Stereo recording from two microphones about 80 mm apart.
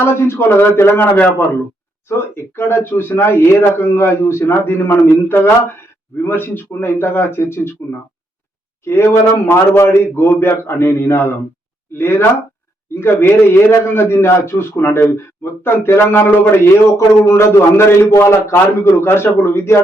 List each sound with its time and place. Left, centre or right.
0.0 s speech: left
8.8 s a man's voice: left